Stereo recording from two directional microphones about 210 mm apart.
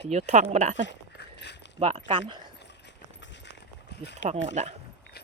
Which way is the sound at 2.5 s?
55° left (ahead or behind).